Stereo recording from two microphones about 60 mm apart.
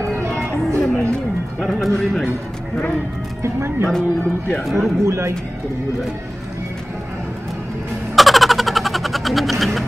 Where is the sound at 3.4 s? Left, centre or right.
Right.